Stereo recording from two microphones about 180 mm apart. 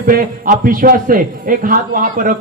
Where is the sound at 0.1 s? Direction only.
50° right (ahead or behind).